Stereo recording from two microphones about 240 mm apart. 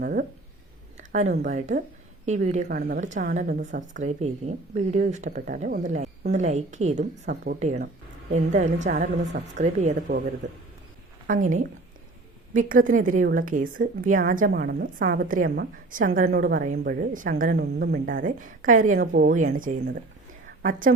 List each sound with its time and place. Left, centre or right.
0.0 s a sound: right
1.1 s a woman's voice: right
11.3 s a woman's voice: right